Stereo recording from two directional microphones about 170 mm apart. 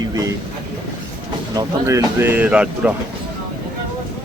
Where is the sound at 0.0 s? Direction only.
20° right (ahead or behind).